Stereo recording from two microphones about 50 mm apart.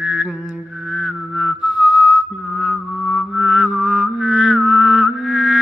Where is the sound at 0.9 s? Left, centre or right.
Centre.